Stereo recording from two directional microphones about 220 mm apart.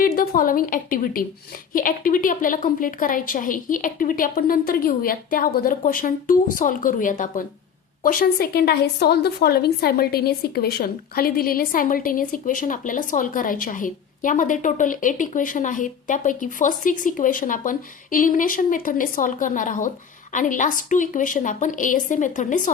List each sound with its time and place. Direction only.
0.0 s a woman's voice: 40° left (ahead or behind)